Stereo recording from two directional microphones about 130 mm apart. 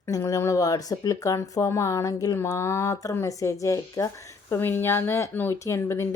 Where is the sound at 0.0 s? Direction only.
25° left (ahead or behind).